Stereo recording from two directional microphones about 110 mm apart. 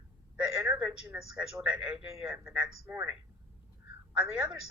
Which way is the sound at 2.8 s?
20° right (ahead or behind).